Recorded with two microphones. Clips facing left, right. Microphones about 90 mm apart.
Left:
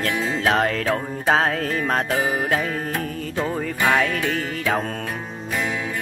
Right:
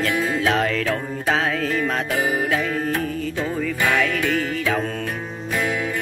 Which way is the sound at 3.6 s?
40° left (ahead or behind).